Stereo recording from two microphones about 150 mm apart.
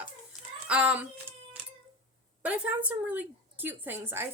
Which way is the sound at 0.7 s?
10° right (ahead or behind).